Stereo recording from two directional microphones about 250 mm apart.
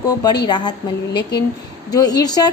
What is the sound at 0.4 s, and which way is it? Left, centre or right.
Speech, centre.